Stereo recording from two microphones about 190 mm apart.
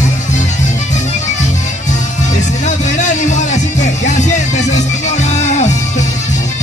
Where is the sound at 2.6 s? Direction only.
40° left (ahead or behind).